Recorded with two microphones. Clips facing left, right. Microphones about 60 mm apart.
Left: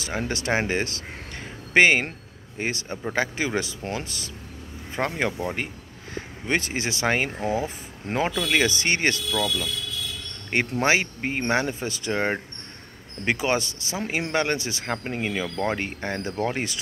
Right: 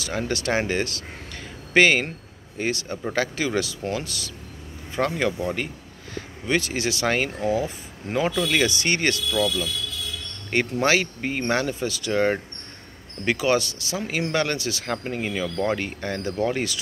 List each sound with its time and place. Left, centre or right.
0.0 s speech: left
10.5 s speech: left